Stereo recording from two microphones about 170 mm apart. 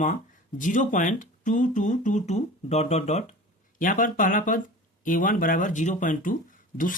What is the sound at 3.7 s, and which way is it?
Speech, 50° left (ahead or behind).